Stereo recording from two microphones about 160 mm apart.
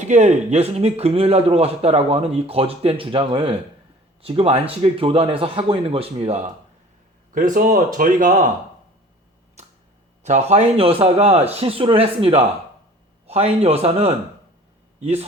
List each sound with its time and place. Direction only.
0.0 s a man's voice: 45° right (ahead or behind)
7.3 s speech: 60° right (ahead or behind)
10.2 s a man's voice: 45° right (ahead or behind)